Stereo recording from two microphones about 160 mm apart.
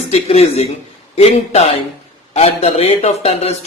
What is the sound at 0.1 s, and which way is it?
Speech, 40° left (ahead or behind).